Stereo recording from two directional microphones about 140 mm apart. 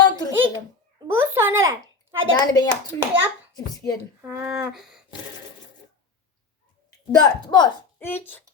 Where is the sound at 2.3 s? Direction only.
30° left (ahead or behind).